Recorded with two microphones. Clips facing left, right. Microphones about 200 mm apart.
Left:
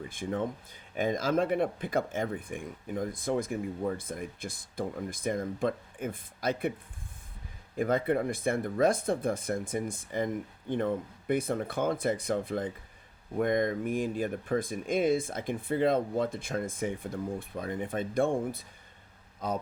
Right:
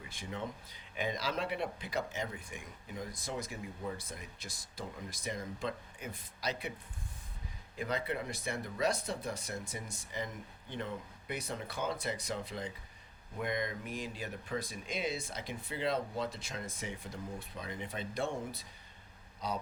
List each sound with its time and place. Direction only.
0.0 s speech: 50° left (ahead or behind)
7.8 s speech: 50° left (ahead or behind)